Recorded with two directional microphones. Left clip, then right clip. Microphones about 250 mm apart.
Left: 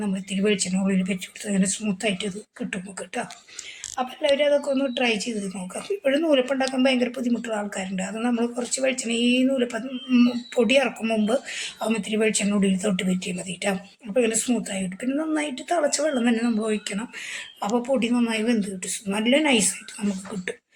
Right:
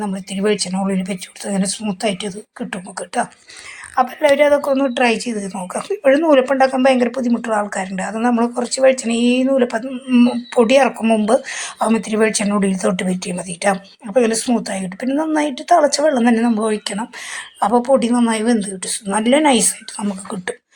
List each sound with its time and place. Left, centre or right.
0.0 s a woman's voice: centre